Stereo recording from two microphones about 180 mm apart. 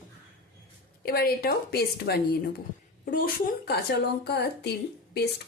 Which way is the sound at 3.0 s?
50° left (ahead or behind).